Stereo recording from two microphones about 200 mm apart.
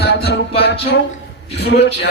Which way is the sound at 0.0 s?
55° left (ahead or behind).